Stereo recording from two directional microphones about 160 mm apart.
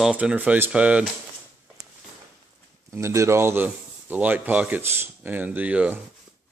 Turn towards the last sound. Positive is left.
turn(degrees=-10)  # may be behind; listen again after turning